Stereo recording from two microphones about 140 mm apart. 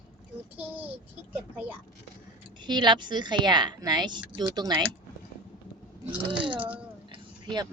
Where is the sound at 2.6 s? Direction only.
30° right (ahead or behind).